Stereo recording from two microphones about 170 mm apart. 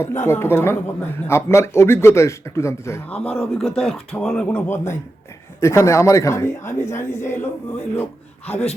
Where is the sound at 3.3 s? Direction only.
Centre (ahead or behind).